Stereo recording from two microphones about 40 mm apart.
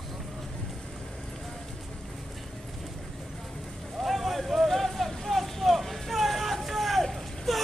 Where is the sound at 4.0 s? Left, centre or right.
Centre.